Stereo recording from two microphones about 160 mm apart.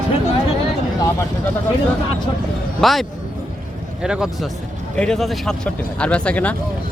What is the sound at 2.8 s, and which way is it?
Speech, centre (ahead or behind).